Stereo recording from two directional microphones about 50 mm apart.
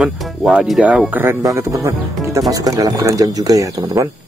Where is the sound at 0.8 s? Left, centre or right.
Centre.